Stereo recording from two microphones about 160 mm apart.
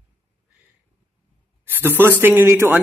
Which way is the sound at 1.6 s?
10° right (ahead or behind).